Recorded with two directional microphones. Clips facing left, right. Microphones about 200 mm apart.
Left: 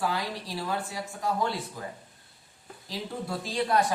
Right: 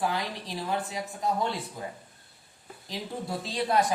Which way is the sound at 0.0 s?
20° right (ahead or behind).